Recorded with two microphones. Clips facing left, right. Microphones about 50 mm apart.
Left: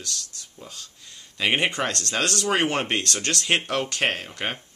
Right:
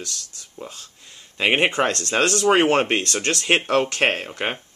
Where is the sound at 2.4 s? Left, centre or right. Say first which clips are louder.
Right 8 dB; right.